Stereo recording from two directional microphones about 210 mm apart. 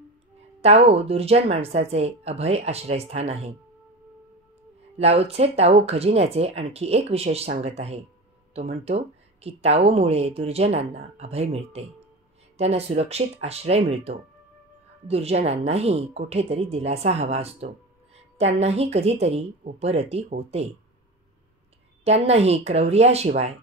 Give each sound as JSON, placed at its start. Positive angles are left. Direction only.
{"t": 0.6, "sound": "speech", "side_deg": -30}
{"t": 4.9, "sound": "speech", "side_deg": -30}
{"t": 22.0, "sound": "speech", "side_deg": -30}